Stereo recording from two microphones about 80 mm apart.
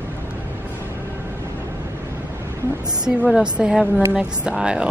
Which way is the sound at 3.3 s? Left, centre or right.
Centre.